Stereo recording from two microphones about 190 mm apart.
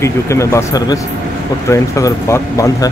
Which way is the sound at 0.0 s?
15° left (ahead or behind).